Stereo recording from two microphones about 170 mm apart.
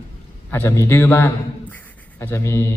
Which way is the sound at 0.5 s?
15° left (ahead or behind).